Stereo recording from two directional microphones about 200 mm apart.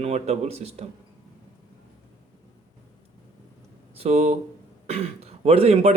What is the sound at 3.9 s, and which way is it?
A man's voice, 30° right (ahead or behind).